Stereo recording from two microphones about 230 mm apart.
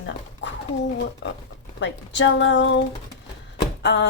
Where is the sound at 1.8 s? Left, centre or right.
Left.